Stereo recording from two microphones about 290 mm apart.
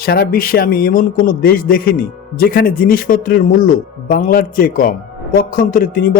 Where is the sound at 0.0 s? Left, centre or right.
Left.